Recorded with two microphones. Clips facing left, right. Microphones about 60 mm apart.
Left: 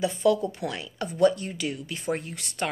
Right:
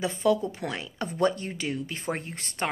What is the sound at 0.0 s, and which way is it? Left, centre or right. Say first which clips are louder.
A woman's voice: left 2 dB; right.